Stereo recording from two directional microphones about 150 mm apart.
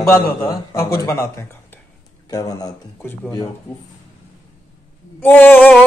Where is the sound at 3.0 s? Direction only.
15° left (ahead or behind).